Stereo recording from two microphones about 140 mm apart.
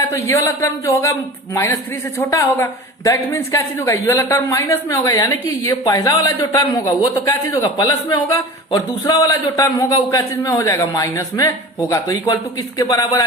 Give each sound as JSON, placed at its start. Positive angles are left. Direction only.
{"t": 0.1, "sound": "a man's voice", "side_deg": 20}